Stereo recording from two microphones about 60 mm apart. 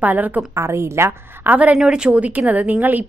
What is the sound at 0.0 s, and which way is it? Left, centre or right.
Speech, right.